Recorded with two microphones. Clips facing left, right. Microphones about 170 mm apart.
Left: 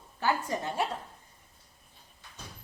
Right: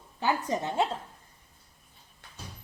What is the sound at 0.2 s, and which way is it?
Speech, 20° right (ahead or behind).